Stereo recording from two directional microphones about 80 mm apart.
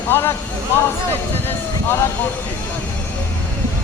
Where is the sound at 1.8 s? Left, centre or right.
Left.